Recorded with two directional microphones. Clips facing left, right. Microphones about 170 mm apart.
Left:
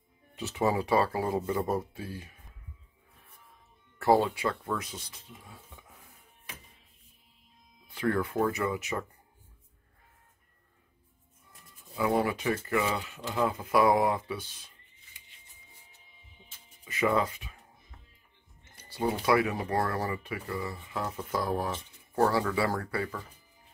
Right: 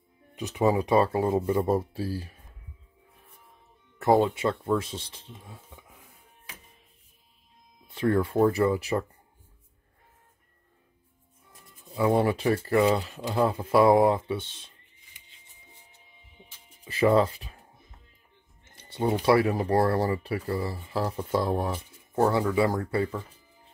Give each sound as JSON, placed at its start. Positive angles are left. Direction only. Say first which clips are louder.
{"t": 0.4, "sound": "speech", "louder": "right 4 dB", "side_deg": -15}
{"t": 4.0, "sound": "speech", "louder": "right 3 dB", "side_deg": -20}
{"t": 7.9, "sound": "speech", "louder": "right 5 dB", "side_deg": -25}
{"t": 11.9, "sound": "speech", "louder": "right 4 dB", "side_deg": -25}
{"t": 16.8, "sound": "speech", "louder": "right 6 dB", "side_deg": -30}
{"t": 18.8, "sound": "speech", "louder": "right 4 dB", "side_deg": -25}